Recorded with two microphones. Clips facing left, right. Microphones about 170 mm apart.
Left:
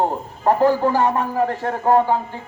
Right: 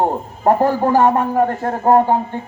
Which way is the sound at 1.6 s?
35° right (ahead or behind).